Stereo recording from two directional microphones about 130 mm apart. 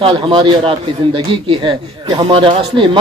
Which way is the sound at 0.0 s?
40° right (ahead or behind).